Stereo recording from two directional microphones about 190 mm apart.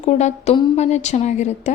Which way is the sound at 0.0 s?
35° left (ahead or behind).